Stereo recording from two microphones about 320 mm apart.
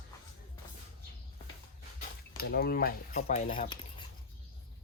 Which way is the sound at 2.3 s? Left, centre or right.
Left.